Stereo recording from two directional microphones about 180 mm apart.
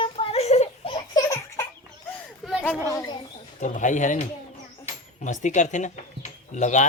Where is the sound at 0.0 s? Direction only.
30° left (ahead or behind).